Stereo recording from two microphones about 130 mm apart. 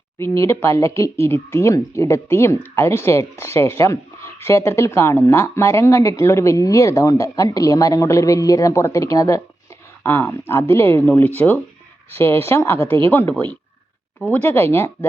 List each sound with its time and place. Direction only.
0.2 s speech: 20° left (ahead or behind)